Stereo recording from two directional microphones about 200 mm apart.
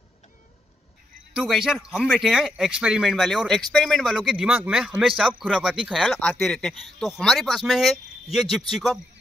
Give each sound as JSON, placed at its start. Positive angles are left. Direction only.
{"t": 1.3, "sound": "speech", "side_deg": 0}